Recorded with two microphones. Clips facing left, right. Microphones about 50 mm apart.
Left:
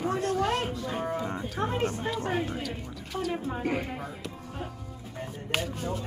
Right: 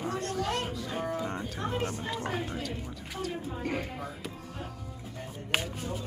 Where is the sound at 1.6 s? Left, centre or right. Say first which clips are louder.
Left 5 dB; centre.